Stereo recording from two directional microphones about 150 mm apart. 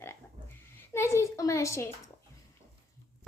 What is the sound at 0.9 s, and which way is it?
A woman's voice, 20° left (ahead or behind).